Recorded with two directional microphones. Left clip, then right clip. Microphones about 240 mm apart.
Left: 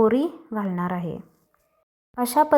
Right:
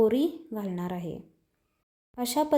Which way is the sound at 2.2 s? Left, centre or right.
Centre.